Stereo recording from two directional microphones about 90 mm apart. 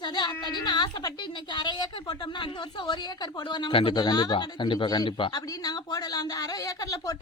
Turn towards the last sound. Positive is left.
turn(degrees=40)  # may be behind; listen again after turning